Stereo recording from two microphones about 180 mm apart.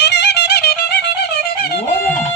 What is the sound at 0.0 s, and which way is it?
Music, 70° left (ahead or behind).